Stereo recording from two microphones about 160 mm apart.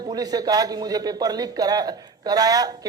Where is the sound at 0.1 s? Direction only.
25° right (ahead or behind).